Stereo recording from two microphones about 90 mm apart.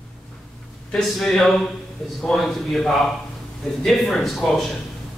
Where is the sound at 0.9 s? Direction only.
5° left (ahead or behind).